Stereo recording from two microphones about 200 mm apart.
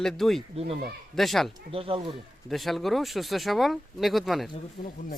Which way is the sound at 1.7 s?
25° right (ahead or behind).